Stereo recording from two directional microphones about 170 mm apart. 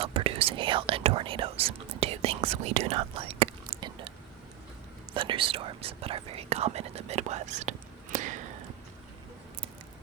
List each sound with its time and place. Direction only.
0.0 s whispering: 35° right (ahead or behind)
5.1 s speech: 30° right (ahead or behind); by 8.4 s 45° right (ahead or behind)